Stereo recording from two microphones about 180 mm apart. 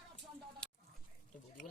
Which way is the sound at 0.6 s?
5° left (ahead or behind).